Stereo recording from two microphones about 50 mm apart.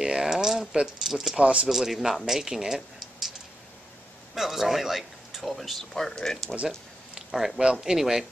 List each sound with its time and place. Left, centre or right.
0.0 s speech: centre
1.4 s a man's voice: right
1.7 s speech: centre
4.4 s speech: centre
7.2 s speech: centre